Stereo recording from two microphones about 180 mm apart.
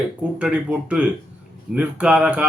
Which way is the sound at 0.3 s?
5° right (ahead or behind).